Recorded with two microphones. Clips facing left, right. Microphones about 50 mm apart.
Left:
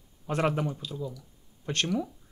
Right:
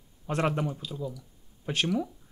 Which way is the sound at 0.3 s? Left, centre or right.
Centre.